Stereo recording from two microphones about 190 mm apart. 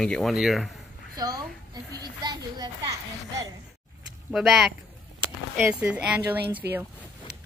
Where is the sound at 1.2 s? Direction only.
20° right (ahead or behind).